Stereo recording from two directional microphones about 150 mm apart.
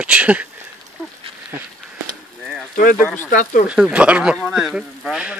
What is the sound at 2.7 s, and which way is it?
Speech, 65° left (ahead or behind).